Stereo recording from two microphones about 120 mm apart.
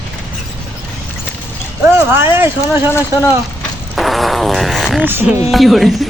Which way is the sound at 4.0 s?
Centre (ahead or behind).